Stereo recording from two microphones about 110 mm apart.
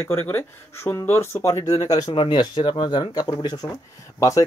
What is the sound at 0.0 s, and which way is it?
Speech, 20° left (ahead or behind).